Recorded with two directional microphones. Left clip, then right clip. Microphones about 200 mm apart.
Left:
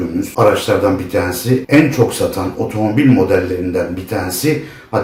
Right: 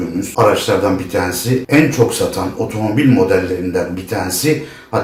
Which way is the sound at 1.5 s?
5° left (ahead or behind).